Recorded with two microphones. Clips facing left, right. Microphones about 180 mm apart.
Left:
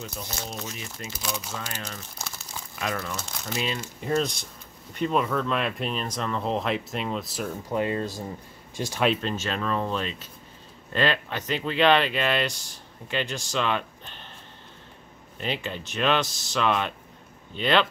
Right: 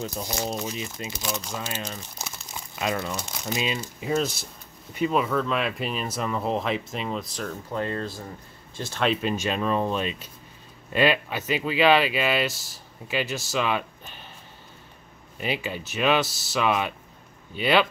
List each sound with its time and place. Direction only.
0.0 s speech: 35° right (ahead or behind)
0.6 s speech: 15° right (ahead or behind)
1.2 s speech: 5° left (ahead or behind)
1.8 s crumpling: 15° right (ahead or behind)
3.3 s speech: 10° right (ahead or behind)
7.4 s speech: 15° left (ahead or behind)
9.2 s speech: 15° right (ahead or behind)
15.3 s speech: 10° right (ahead or behind)